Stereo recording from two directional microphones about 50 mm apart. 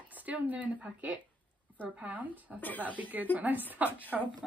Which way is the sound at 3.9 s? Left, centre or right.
Left.